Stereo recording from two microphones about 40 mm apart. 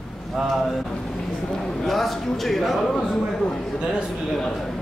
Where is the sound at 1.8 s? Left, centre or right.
Centre.